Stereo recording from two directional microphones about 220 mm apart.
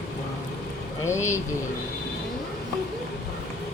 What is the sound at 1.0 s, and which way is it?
Speech, 10° left (ahead or behind).